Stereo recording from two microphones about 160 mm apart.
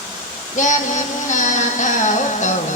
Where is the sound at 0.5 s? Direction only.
50° left (ahead or behind).